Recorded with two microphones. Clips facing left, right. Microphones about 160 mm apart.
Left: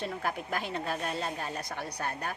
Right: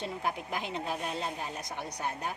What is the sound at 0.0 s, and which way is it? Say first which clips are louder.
A woman's voice: left 1 dB; 20° right (ahead or behind).